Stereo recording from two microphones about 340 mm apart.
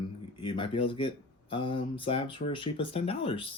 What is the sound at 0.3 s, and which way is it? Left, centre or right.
Speech, centre.